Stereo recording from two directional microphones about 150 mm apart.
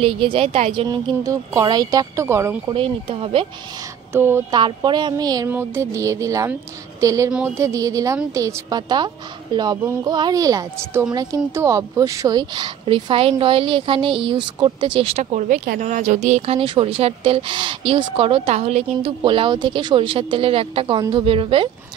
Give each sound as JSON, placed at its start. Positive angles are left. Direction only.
{"t": 0.0, "sound": "speech", "side_deg": -35}
{"t": 0.8, "sound": "a woman's voice", "side_deg": -25}
{"t": 2.7, "sound": "speech", "side_deg": -35}
{"t": 4.1, "sound": "speech", "side_deg": -15}
{"t": 4.6, "sound": "a woman's voice", "side_deg": -30}
{"t": 15.4, "sound": "speech", "side_deg": -65}